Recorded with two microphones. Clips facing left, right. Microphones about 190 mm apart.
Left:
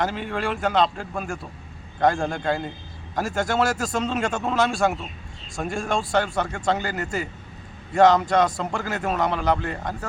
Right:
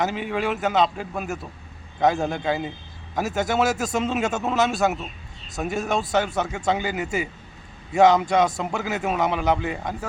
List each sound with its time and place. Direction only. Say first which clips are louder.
0.0 s a man's voice: right 1 dB; 10° right (ahead or behind)